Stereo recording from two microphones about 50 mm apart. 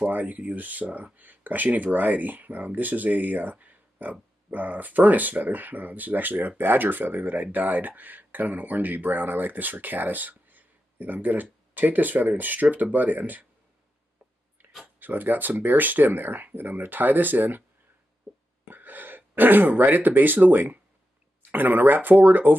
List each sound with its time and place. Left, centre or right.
0.0 s speech: right
15.0 s speech: right
18.7 s speech: right